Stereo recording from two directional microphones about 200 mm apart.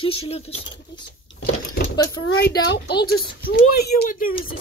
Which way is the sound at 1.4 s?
70° left (ahead or behind).